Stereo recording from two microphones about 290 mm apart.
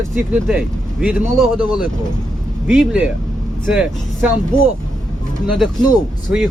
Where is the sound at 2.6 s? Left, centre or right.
Centre.